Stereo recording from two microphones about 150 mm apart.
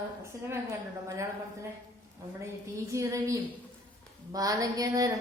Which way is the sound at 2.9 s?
20° right (ahead or behind).